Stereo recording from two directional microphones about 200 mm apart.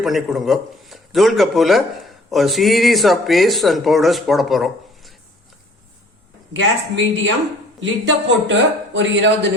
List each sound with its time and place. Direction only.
0.0 s speech: centre (ahead or behind)
6.5 s a man's voice: 70° right (ahead or behind)